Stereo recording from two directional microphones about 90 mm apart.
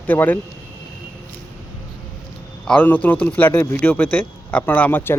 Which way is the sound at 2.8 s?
20° left (ahead or behind).